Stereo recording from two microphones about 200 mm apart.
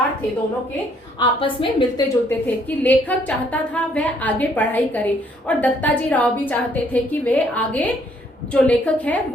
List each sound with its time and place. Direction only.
1.2 s a woman's voice: 25° left (ahead or behind)
2.6 s a woman's voice: 10° left (ahead or behind)